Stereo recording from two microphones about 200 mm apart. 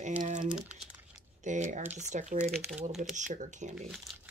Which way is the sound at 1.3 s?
35° right (ahead or behind).